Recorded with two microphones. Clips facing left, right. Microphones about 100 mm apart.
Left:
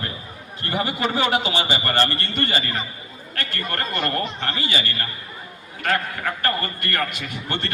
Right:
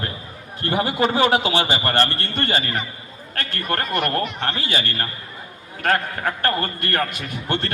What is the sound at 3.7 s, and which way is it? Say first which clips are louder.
A man's voice: right 4 dB; 55° right (ahead or behind).